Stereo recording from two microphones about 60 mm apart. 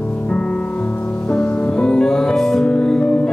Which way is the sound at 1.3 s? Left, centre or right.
Centre.